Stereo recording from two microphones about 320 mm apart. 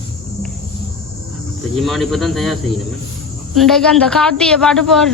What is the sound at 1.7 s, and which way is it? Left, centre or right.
Speech, centre.